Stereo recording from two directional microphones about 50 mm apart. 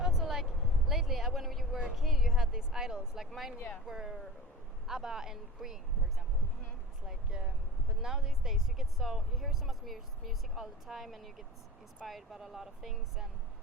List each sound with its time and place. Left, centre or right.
0.0 s a sound: centre
3.2 s speech: centre
7.3 s speech: right
8.0 s speech: centre